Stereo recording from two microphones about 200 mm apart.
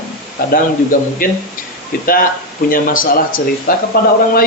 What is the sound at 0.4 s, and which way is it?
Speech, 50° left (ahead or behind).